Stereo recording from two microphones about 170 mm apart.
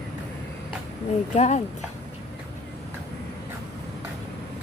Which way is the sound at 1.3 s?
45° left (ahead or behind).